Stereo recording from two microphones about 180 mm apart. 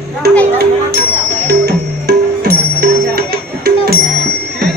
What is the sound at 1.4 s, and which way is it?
Music, 65° right (ahead or behind).